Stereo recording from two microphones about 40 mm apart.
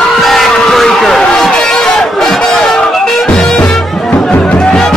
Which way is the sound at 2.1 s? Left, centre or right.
Centre.